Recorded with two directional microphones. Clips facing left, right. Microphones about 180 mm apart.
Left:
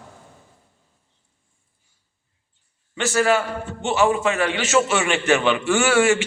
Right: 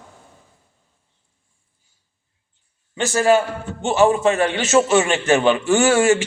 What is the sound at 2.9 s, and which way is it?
Speech, 20° right (ahead or behind).